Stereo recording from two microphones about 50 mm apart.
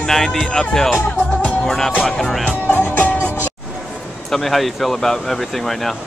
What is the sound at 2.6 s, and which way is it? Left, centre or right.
Music, left.